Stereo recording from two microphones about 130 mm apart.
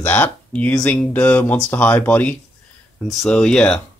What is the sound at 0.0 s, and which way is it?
Speech, 15° left (ahead or behind).